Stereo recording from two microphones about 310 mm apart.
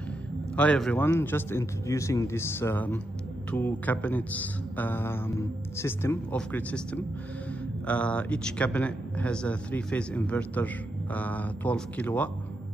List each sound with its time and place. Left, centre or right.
0.6 s a man's voice: centre